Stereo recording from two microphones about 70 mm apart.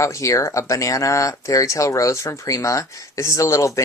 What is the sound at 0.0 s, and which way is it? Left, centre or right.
Speech, left.